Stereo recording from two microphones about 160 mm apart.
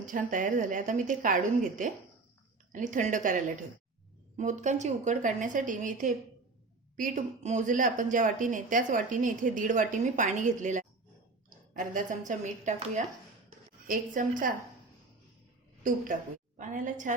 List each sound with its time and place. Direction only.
0.0 s a woman's voice: 55° right (ahead or behind)
13.8 s a woman's voice: 60° right (ahead or behind)
16.6 s speech: 50° right (ahead or behind)